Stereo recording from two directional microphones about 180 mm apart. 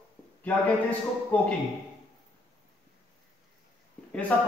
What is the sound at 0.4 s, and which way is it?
Speech, 10° left (ahead or behind).